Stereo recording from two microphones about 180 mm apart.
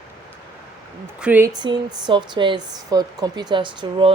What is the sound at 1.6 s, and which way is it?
Speech, 25° right (ahead or behind).